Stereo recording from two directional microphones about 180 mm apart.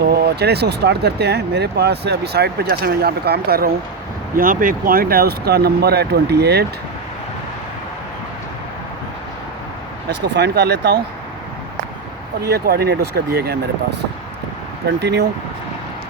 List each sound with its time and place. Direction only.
0.0 s speech: 60° right (ahead or behind)
10.3 s speech: 65° right (ahead or behind)
12.5 s speech: 60° right (ahead or behind)
14.8 s speech: 65° right (ahead or behind)